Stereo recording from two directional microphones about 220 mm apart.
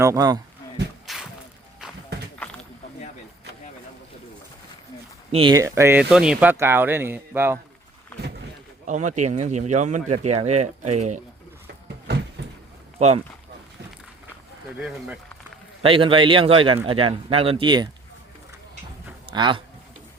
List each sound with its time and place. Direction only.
0.0 s speech: 15° right (ahead or behind)
1.0 s a sound: centre (ahead or behind)
2.4 s a sound: 5° left (ahead or behind)
5.3 s speech: 20° right (ahead or behind)
8.9 s speech: 35° right (ahead or behind)
12.4 s a sound: 50° right (ahead or behind)
13.0 s a man's voice: 30° right (ahead or behind)
14.8 s speech: 5° right (ahead or behind)
15.8 s a man's voice: 25° right (ahead or behind)
19.3 s a man's voice: 20° right (ahead or behind)